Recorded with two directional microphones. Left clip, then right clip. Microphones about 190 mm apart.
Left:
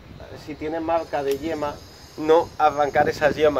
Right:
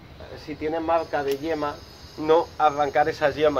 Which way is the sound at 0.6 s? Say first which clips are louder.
Even; 25° left (ahead or behind).